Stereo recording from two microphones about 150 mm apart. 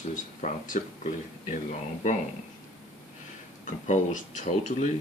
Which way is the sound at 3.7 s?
55° left (ahead or behind).